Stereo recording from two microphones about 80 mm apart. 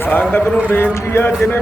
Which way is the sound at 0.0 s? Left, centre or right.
Left.